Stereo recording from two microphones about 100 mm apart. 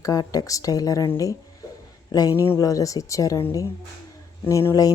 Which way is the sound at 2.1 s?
40° left (ahead or behind).